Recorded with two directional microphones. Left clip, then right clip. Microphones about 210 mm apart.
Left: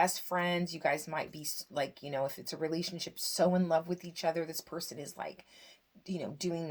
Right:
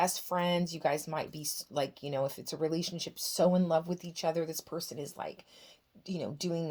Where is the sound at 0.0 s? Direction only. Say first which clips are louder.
Even; 50° right (ahead or behind).